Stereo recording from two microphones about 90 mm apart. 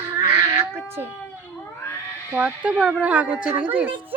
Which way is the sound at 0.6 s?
25° right (ahead or behind).